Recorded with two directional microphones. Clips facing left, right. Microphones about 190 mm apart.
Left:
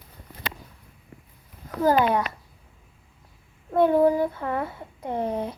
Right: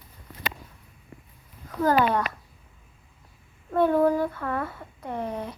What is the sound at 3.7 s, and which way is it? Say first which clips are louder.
Speech: left 2 dB; 15° left (ahead or behind).